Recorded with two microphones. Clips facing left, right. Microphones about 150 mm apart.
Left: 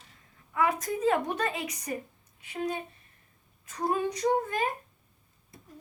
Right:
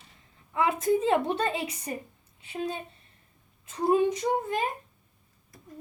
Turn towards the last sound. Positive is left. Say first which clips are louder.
# left 1 dB
turn(degrees=-25)  # may be behind; listen again after turning